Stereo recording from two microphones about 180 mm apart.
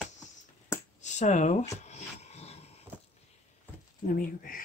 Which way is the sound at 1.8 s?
40° left (ahead or behind).